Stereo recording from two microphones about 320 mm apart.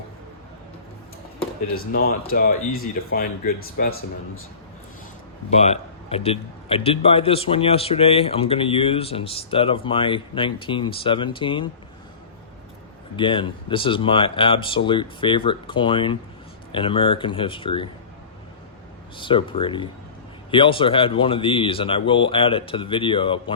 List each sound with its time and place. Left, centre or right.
1.7 s speech: left
5.5 s a man's voice: centre
13.1 s a man's voice: centre
19.1 s a man's voice: centre